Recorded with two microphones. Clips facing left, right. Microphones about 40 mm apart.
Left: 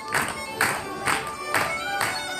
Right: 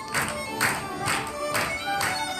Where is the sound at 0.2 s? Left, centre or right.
Centre.